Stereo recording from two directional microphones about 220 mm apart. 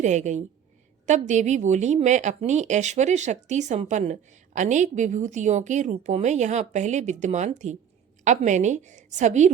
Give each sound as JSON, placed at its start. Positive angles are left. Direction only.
{"t": 0.0, "sound": "speech", "side_deg": -35}